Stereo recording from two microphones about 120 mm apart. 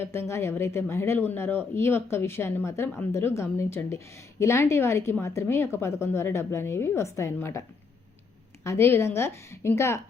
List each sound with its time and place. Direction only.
0.0 s speech: 20° left (ahead or behind)
8.6 s speech: 20° left (ahead or behind)